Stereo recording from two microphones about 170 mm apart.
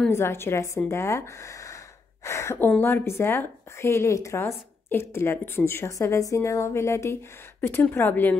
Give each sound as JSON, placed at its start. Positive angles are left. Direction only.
{"t": 0.0, "sound": "a woman's voice", "side_deg": 15}